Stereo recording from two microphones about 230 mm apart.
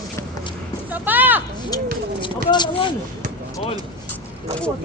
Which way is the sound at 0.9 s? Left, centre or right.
Centre.